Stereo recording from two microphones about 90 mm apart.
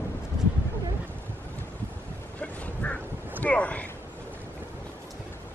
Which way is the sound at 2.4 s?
15° left (ahead or behind).